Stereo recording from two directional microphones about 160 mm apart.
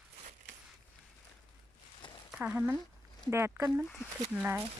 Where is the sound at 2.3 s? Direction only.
10° right (ahead or behind).